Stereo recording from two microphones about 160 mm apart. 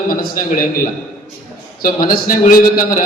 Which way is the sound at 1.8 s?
60° left (ahead or behind).